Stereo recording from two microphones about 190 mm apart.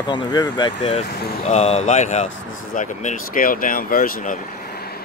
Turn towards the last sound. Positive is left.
turn(degrees=45)  # may be behind; listen again after turning